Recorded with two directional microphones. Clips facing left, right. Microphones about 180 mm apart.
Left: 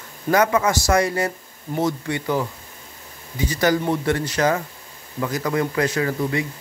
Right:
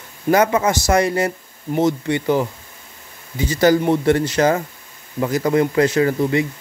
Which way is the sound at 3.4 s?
25° right (ahead or behind).